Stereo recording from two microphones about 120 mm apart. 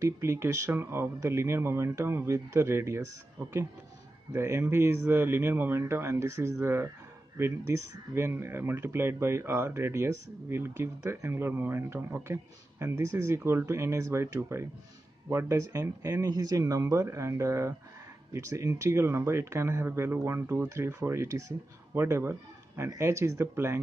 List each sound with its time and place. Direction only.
0.0 s speech: 25° right (ahead or behind)
4.3 s speech: 25° right (ahead or behind)